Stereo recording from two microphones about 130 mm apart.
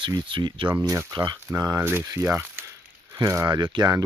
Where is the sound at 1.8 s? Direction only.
15° right (ahead or behind).